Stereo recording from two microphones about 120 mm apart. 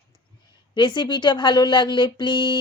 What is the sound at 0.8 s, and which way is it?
Speech, 40° left (ahead or behind).